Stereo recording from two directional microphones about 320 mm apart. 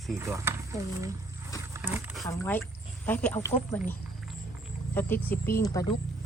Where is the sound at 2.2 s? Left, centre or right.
Centre.